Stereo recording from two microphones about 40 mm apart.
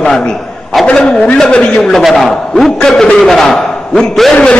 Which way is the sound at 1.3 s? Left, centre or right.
Left.